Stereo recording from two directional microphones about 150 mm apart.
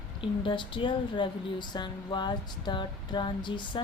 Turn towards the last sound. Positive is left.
turn(degrees=30)  # may be behind; listen again after turning